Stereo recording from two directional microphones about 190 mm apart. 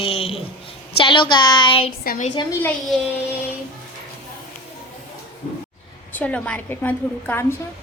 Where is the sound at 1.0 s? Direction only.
25° left (ahead or behind).